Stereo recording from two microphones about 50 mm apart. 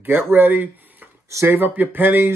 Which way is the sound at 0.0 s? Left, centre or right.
Right.